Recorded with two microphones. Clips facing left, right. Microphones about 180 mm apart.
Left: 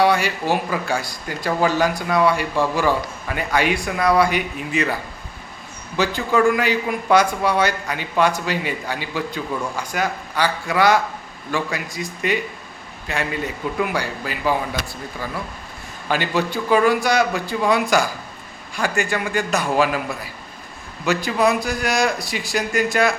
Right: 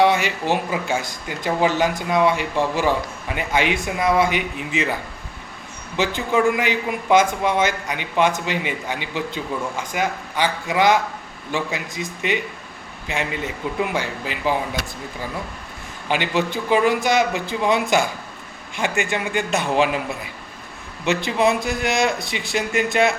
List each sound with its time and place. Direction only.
0.0 s a sound: 20° right (ahead or behind)
0.5 s a man's voice: 20° right (ahead or behind)
6.0 s a man's voice: 20° right (ahead or behind)
16.0 s a man's voice: 20° right (ahead or behind)